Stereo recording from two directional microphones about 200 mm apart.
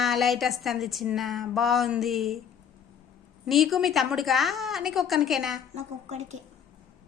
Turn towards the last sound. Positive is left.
turn(degrees=-30)  # may be behind; listen again after turning